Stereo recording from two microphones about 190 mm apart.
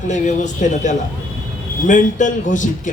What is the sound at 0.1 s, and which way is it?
A man's voice, 40° left (ahead or behind).